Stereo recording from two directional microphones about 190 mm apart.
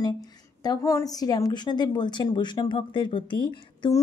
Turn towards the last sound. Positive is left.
turn(degrees=25)  # may be behind; listen again after turning